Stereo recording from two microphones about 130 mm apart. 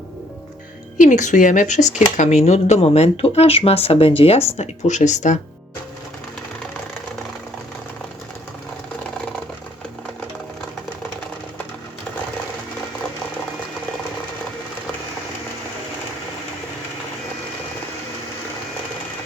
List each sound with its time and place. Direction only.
0.9 s speech: 75° left (ahead or behind); by 4.4 s 50° left (ahead or behind)
4.5 s speech: 60° left (ahead or behind)